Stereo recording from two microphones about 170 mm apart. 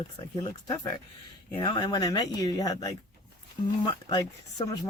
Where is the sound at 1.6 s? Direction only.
20° left (ahead or behind).